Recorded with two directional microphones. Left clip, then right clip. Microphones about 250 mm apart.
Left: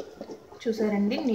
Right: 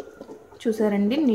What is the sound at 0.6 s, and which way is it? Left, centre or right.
Speech, right.